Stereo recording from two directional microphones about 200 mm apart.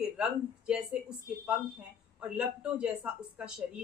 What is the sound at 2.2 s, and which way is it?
Speech, 5° right (ahead or behind).